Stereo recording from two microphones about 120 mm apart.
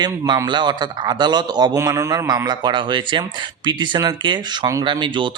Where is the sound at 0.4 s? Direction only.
40° right (ahead or behind).